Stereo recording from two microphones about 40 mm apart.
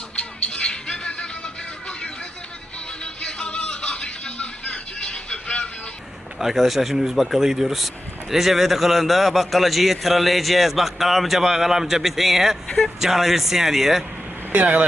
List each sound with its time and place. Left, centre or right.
0.2 s music: left
3.0 s music: left
6.4 s a man's voice: centre
14.5 s speech: right